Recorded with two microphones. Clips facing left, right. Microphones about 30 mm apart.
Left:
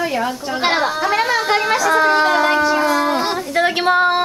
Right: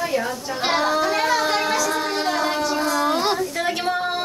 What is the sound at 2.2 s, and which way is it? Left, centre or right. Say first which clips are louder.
Civil defense siren: left 7 dB; left.